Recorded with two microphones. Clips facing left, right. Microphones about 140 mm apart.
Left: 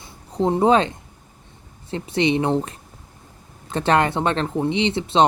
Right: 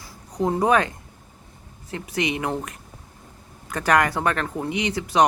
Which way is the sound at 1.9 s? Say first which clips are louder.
Left 6 dB; 30° left (ahead or behind).